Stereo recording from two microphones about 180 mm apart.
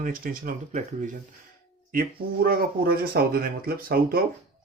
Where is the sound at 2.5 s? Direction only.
55° right (ahead or behind).